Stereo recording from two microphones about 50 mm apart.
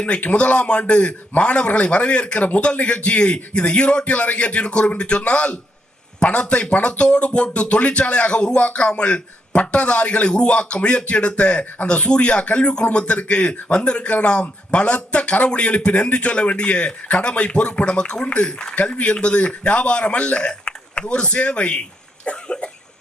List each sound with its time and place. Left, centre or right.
0.0 s speech: left
22.2 s cough: centre